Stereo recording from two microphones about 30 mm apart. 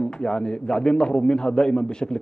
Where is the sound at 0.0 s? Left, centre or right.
Left.